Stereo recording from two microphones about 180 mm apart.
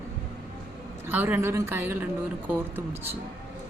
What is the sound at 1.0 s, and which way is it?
A woman's voice, 10° right (ahead or behind).